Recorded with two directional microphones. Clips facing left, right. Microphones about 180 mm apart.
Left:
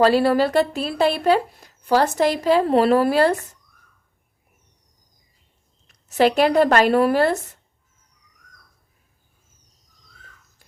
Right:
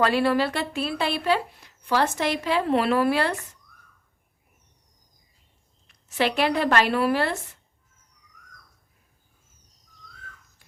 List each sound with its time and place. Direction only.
0.0 s a woman's voice: 40° left (ahead or behind)
5.9 s speech: 40° left (ahead or behind)